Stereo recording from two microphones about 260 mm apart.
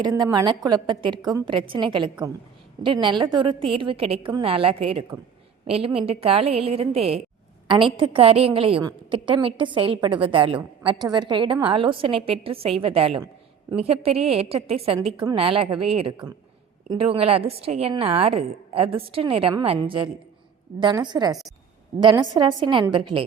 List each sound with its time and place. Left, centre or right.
0.0 s a woman's voice: centre